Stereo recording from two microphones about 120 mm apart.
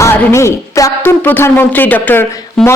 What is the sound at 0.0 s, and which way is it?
A woman's voice, 20° left (ahead or behind).